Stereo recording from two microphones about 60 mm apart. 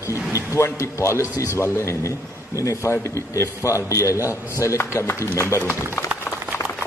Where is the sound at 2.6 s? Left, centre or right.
Left.